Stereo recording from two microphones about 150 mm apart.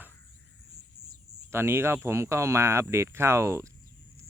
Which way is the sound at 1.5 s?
15° right (ahead or behind).